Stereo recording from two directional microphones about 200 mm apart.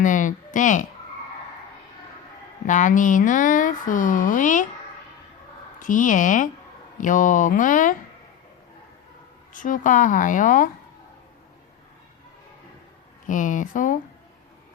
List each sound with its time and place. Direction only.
0.0 s speech: 40° left (ahead or behind)
2.6 s speech: 40° left (ahead or behind)
5.8 s speech: 40° left (ahead or behind)
9.5 s speech: 40° left (ahead or behind)
13.2 s speech: 40° left (ahead or behind)